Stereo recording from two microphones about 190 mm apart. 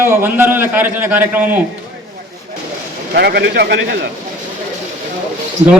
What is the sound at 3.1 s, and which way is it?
Speech, 60° right (ahead or behind).